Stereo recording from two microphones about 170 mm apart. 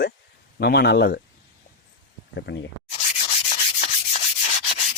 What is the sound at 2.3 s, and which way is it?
Speech, 90° left.